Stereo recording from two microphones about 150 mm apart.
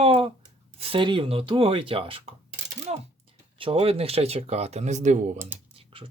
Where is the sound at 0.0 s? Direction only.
40° right (ahead or behind).